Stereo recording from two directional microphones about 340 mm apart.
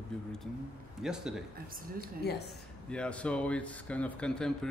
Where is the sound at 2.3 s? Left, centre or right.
Left.